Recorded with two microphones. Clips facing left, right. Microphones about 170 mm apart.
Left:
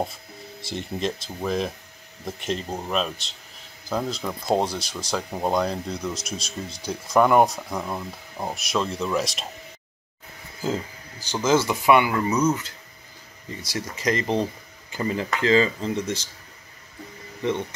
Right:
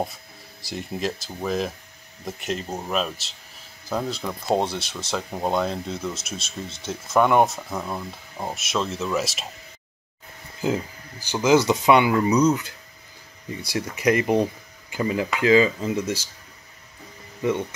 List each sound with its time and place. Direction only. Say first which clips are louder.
0.0 s speech: even; centre (ahead or behind)
4.6 s speech: even; 25° right (ahead or behind)
5.1 s speech: even; centre (ahead or behind)
6.3 s speech: left 1 dB; 25° right (ahead or behind)
6.9 s speech: left 1 dB; centre (ahead or behind)
10.6 s speech: right 2 dB; 15° right (ahead or behind)
13.7 s speech: right 4 dB; 10° right (ahead or behind)